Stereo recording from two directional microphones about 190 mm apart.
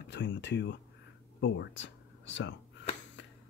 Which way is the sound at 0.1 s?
65° left (ahead or behind).